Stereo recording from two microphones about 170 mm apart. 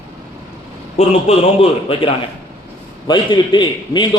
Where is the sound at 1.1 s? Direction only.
35° left (ahead or behind).